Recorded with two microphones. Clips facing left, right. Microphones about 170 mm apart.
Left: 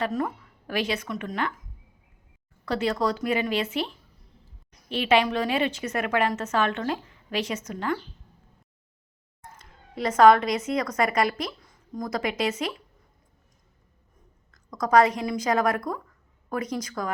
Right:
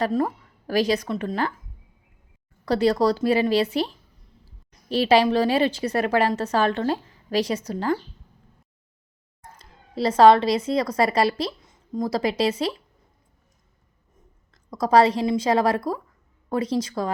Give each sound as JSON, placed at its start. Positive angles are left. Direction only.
{"t": 0.0, "sound": "a woman's voice", "side_deg": -30}
{"t": 2.6, "sound": "a woman's voice", "side_deg": -35}
{"t": 9.6, "sound": "a woman's voice", "side_deg": -35}
{"t": 14.5, "sound": "a woman's voice", "side_deg": -30}